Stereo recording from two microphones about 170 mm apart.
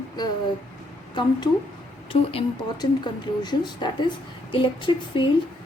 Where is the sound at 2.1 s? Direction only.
35° left (ahead or behind).